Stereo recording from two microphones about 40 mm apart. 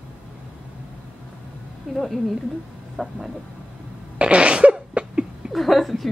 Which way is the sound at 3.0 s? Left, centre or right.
Centre.